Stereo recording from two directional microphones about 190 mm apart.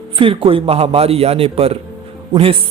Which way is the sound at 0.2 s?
30° right (ahead or behind).